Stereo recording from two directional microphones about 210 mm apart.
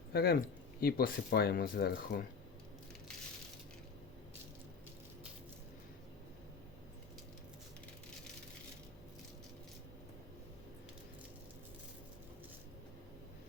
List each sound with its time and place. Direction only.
0.1 s speech: 50° left (ahead or behind)